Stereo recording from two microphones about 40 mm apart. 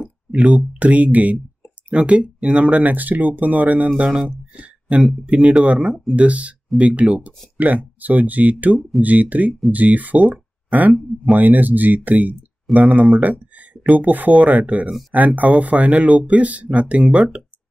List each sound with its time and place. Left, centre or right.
0.3 s speech: right
4.6 s a sound: right
5.2 s speech: right
10.2 s a sound: right
11.3 s speech: right
12.7 s speech: centre
13.0 s speech: right